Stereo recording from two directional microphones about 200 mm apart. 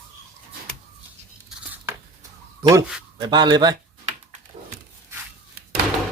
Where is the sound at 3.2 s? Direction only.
20° right (ahead or behind).